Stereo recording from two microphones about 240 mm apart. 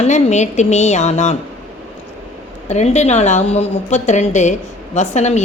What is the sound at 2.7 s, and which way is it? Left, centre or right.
A woman's voice, left.